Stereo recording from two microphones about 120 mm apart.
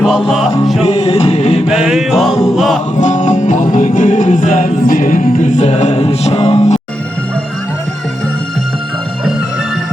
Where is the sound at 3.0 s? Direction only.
90° left; by 6.7 s 60° left (ahead or behind).